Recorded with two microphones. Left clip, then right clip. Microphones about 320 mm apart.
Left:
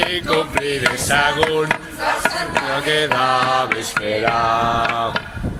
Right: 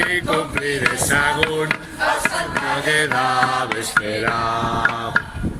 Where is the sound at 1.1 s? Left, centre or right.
Centre.